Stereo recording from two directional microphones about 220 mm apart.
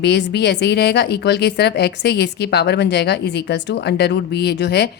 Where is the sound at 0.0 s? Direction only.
50° left (ahead or behind).